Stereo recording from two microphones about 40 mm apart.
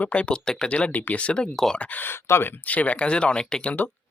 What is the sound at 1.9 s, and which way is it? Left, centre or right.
Speech, left.